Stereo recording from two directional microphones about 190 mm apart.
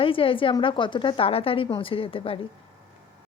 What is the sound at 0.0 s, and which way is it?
Speech, 30° left (ahead or behind).